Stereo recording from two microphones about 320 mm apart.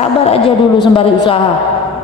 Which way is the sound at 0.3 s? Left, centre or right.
Centre.